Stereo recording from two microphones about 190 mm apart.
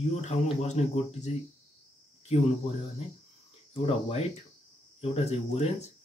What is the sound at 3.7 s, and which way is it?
Speech, 30° left (ahead or behind).